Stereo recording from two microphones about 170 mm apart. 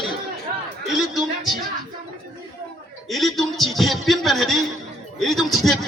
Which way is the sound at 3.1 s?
Centre (ahead or behind).